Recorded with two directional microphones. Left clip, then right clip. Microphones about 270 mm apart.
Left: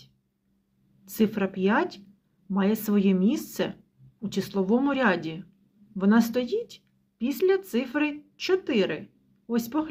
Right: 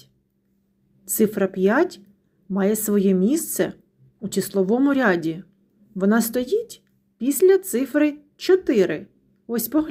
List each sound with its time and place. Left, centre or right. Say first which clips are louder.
1.0 s a woman's voice: right 6 dB; right